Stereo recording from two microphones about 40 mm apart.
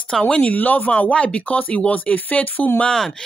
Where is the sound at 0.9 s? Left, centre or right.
Left.